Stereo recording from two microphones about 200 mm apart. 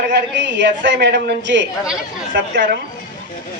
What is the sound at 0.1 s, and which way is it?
A man's voice, 60° right (ahead or behind).